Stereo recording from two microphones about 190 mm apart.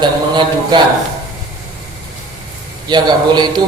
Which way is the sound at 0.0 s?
25° right (ahead or behind).